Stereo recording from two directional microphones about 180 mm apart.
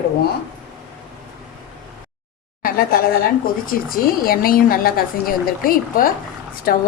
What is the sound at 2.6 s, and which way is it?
A woman's voice, 55° left (ahead or behind).